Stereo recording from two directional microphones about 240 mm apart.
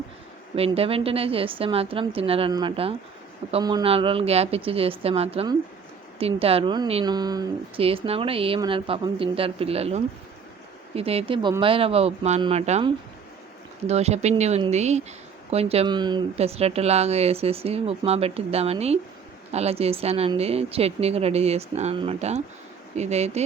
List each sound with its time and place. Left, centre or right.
0.5 s speech: right